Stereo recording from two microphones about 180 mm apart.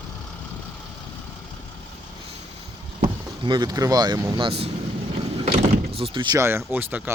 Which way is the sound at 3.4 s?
25° right (ahead or behind).